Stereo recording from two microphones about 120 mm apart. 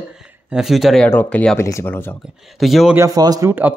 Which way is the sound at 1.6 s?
20° left (ahead or behind).